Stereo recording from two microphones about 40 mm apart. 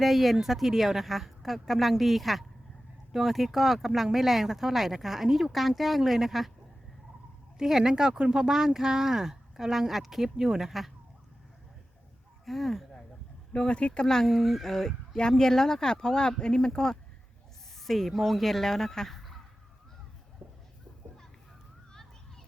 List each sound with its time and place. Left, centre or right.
0.0 s speech: centre
7.6 s speech: centre
10.7 s speech: centre
12.5 s speech: centre
13.5 s speech: left
14.3 s speech: centre
17.8 s speech: centre